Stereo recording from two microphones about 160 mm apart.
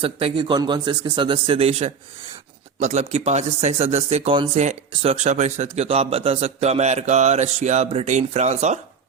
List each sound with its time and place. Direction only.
0.0 s speech: 35° right (ahead or behind)
4.5 s speech: 45° right (ahead or behind)